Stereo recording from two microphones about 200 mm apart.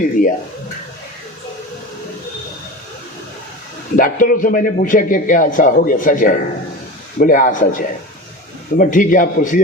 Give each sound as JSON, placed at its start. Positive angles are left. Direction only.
{"t": 0.0, "sound": "a man's voice", "side_deg": 40}
{"t": 3.9, "sound": "a man's voice", "side_deg": 45}